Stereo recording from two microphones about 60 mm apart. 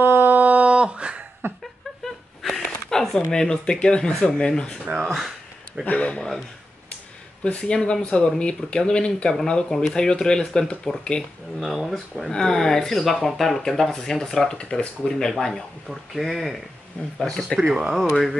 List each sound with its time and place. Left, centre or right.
0.0 s a sound: right; by 1.2 s centre
1.4 s a sound: right
2.9 s a sound: centre
3.3 s speech: centre
4.9 s speech: centre
5.9 s speech: left
6.1 s speech: centre
7.4 s speech: centre
11.6 s speech: centre
12.3 s speech: centre
15.9 s speech: centre
17.2 s speech: centre
17.6 s speech: centre